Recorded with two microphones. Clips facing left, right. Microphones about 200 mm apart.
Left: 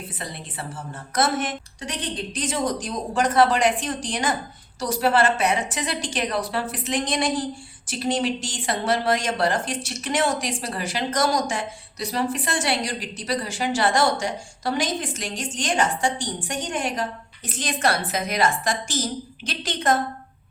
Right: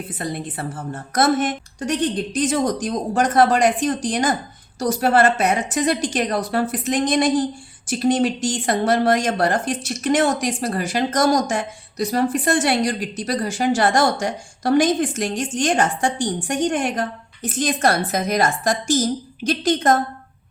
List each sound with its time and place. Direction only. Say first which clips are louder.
0.2 s speech: right 10 dB; 45° right (ahead or behind)